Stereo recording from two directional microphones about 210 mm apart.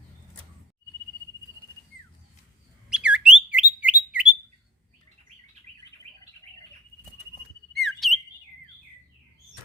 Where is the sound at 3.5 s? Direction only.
5° right (ahead or behind).